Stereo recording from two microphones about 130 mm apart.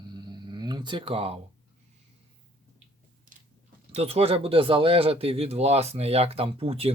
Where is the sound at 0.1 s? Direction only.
35° right (ahead or behind).